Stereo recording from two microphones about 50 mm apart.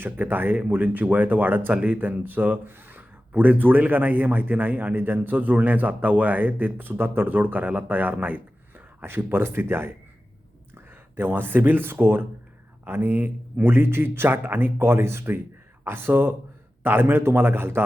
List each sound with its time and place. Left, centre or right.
0.0 s speech: right
9.0 s speech: right